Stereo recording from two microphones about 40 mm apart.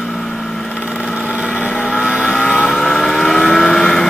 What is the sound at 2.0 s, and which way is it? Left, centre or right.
Vehicle, right.